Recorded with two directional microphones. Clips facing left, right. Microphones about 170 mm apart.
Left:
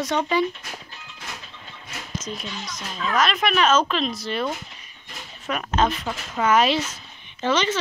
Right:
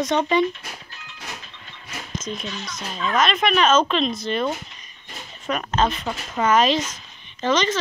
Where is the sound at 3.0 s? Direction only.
5° left (ahead or behind).